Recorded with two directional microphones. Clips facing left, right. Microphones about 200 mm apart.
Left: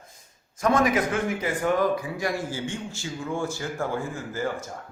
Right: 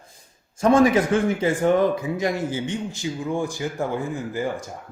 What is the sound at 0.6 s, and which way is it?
A man's voice, 30° right (ahead or behind).